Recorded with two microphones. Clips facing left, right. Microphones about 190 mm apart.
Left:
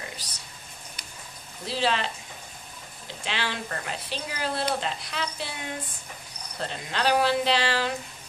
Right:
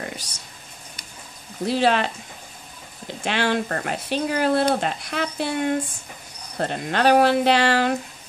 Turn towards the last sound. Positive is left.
turn(degrees=-55)  # may be behind; listen again after turning